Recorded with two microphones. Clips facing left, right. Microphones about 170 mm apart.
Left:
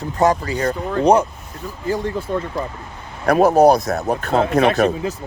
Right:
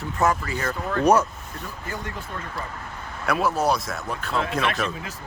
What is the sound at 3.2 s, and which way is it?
Speech, 40° left (ahead or behind).